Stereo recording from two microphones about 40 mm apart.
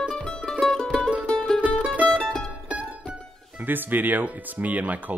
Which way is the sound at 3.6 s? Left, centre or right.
Right.